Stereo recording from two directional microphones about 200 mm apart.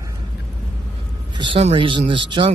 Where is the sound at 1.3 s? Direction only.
25° right (ahead or behind).